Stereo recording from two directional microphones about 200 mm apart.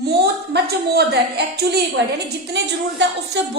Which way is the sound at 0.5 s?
55° right (ahead or behind).